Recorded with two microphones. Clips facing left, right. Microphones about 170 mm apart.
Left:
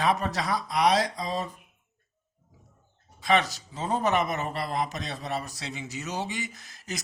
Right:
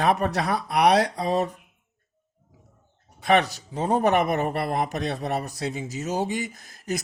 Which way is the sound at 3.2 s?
60° right (ahead or behind).